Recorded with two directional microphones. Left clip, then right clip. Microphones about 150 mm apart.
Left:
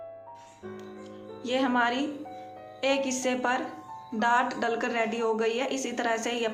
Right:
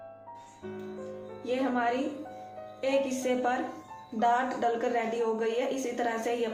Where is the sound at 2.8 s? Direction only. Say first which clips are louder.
Left 1 dB; 45° left (ahead or behind).